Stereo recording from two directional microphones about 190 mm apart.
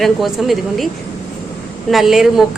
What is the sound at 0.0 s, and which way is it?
Speech, centre (ahead or behind).